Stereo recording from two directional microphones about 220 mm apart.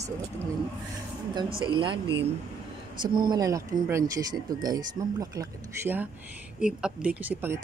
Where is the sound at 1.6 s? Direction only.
20° right (ahead or behind).